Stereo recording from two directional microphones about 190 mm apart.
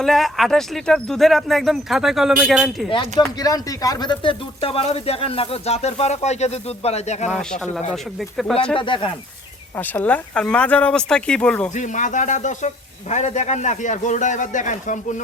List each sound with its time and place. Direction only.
0.0 s speech: centre (ahead or behind)
2.9 s speech: 25° left (ahead or behind)
7.3 s speech: 5° left (ahead or behind)
8.7 s speech: 25° left (ahead or behind)
9.7 s speech: 10° left (ahead or behind)
11.7 s speech: 40° left (ahead or behind)